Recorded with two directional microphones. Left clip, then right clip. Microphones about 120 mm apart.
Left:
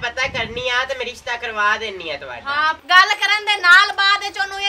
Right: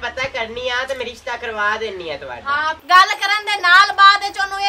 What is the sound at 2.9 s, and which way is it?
A woman's voice, centre (ahead or behind).